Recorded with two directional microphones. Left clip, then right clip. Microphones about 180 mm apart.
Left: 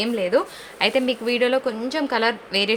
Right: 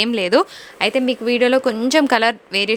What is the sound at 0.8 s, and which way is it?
A woman's voice, 30° right (ahead or behind).